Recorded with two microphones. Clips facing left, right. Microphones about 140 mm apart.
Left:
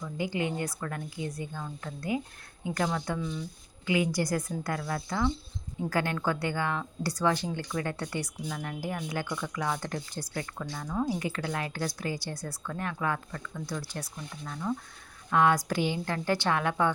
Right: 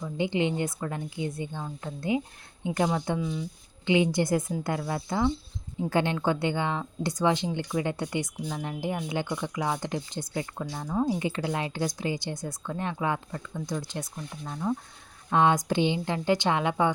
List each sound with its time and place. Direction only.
0.0 s speech: 25° right (ahead or behind)
3.2 s speech: 5° right (ahead or behind)
3.8 s speech: 25° right (ahead or behind)